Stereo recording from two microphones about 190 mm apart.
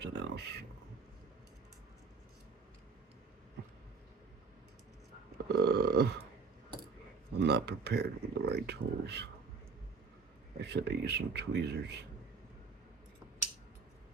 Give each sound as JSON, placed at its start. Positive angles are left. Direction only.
{"t": 0.0, "sound": "a sound", "side_deg": -65}
{"t": 5.5, "sound": "burping", "side_deg": -55}
{"t": 7.3, "sound": "speech", "side_deg": -60}
{"t": 10.6, "sound": "speech", "side_deg": -60}